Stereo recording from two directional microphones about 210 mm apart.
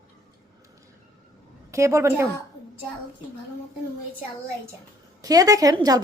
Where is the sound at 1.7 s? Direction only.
15° right (ahead or behind).